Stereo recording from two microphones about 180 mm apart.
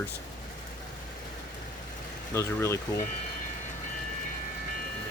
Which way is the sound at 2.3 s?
15° left (ahead or behind).